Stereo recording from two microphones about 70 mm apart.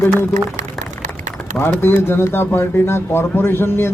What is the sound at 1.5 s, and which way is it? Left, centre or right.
Speech, left.